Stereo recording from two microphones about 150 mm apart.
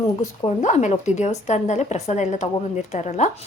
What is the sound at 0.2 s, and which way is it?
Speech, 55° left (ahead or behind).